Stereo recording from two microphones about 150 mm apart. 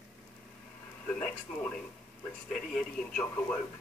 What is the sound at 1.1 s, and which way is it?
A man's voice, 5° left (ahead or behind).